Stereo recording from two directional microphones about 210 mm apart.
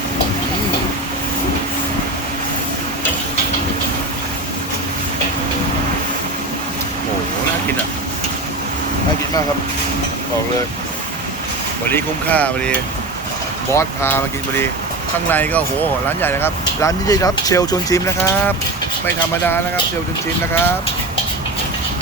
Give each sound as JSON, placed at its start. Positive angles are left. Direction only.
{"t": 11.9, "sound": "speech", "side_deg": 10}
{"t": 13.7, "sound": "speech", "side_deg": 10}